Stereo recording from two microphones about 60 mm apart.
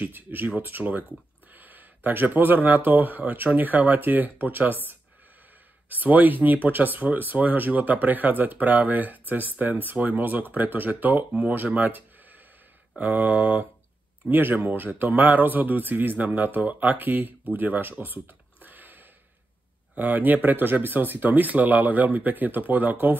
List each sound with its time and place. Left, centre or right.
0.0 s speech: right
13.0 s speech: right